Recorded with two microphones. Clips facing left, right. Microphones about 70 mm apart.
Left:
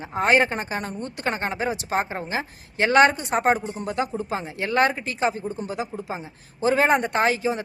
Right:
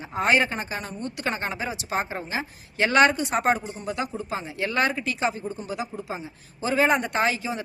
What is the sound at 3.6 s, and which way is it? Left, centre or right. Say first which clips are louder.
Speech: left 2 dB; left.